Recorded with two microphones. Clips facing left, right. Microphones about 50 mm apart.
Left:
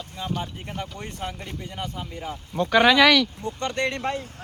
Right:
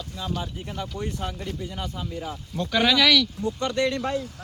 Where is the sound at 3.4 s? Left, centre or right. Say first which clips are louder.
Right 2 dB; left.